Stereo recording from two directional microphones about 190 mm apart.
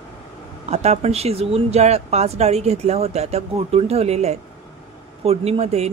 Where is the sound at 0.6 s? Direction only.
35° right (ahead or behind).